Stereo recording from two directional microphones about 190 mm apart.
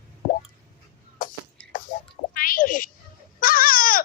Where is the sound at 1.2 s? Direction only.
45° left (ahead or behind).